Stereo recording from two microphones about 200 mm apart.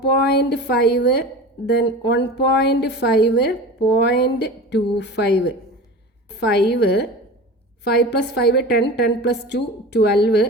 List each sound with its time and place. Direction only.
0.0 s a woman's voice: 55° left (ahead or behind)
6.3 s a woman's voice: 55° left (ahead or behind)